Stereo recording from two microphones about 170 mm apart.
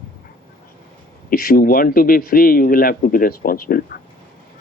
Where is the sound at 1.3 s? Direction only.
60° left (ahead or behind).